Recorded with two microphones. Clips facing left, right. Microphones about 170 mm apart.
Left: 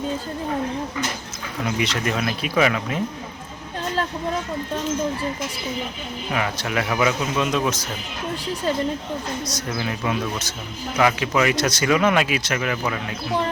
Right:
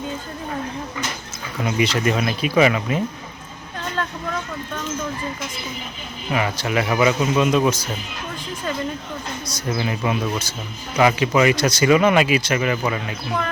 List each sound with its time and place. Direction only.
1.6 s speech: centre (ahead or behind)
3.9 s speech: 30° left (ahead or behind)
6.3 s speech: centre (ahead or behind)
9.5 s speech: centre (ahead or behind)